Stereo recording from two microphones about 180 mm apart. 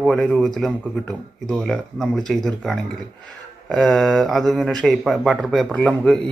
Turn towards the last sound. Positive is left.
turn(degrees=5)  # may be behind; listen again after turning